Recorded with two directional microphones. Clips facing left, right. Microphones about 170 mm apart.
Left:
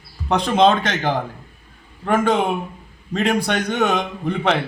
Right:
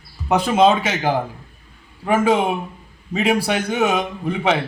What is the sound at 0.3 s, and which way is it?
A man's voice, 5° right (ahead or behind).